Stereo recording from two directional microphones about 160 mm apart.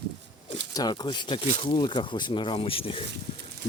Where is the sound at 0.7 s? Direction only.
25° left (ahead or behind).